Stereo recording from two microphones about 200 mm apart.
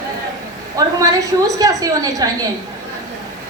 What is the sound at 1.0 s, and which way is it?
A woman's voice, 15° right (ahead or behind).